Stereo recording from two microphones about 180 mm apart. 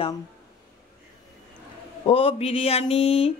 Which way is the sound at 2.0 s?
30° left (ahead or behind).